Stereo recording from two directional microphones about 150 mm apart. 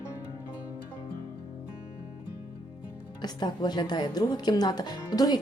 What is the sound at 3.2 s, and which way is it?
Speech, 30° left (ahead or behind).